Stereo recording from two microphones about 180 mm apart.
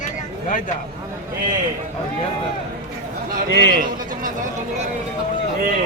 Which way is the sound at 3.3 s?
60° right (ahead or behind).